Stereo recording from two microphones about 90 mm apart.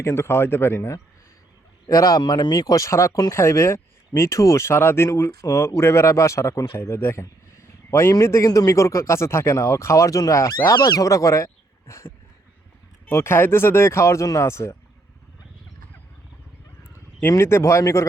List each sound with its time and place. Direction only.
0.0 s a man's voice: 30° left (ahead or behind)
13.1 s speech: 25° left (ahead or behind)
17.2 s speech: 30° left (ahead or behind)